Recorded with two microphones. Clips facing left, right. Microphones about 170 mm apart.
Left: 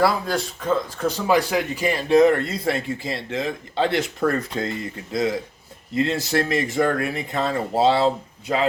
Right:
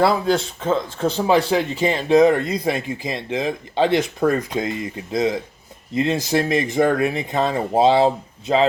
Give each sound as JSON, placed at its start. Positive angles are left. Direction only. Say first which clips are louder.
{"t": 0.0, "sound": "speech", "louder": "right 3 dB", "side_deg": -25}